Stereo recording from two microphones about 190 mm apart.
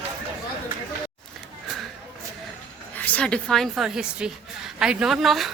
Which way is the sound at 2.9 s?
10° left (ahead or behind).